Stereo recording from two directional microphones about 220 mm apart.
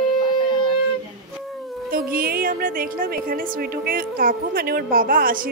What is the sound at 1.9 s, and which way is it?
A woman's voice, 40° right (ahead or behind).